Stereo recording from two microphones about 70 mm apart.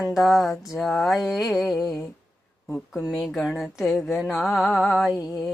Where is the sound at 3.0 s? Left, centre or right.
Centre.